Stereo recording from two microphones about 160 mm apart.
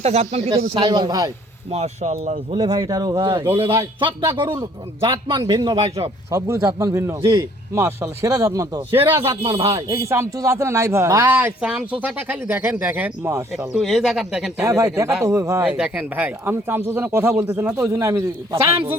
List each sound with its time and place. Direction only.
0.0 s speech: 40° right (ahead or behind)
0.8 s speech: 25° right (ahead or behind)
1.7 s speech: 45° right (ahead or behind)
2.5 s speech: 25° right (ahead or behind)
3.4 s speech: 15° right (ahead or behind)
4.4 s speech: 30° right (ahead or behind)
9.4 s speech: 35° right (ahead or behind)
9.9 s speech: 15° right (ahead or behind)
13.7 s speech: centre (ahead or behind)
14.6 s speech: 20° right (ahead or behind)
15.6 s speech: 5° right (ahead or behind)